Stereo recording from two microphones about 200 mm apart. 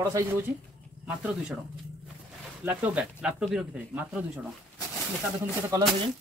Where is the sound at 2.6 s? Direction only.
5° right (ahead or behind).